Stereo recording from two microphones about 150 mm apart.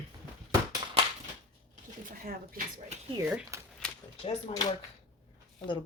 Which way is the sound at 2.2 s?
75° right (ahead or behind).